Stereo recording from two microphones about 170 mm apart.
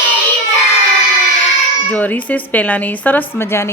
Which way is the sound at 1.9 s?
10° left (ahead or behind).